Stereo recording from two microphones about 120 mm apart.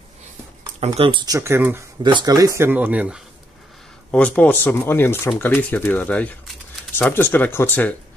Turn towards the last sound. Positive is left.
turn(degrees=15)  # may be behind; listen again after turning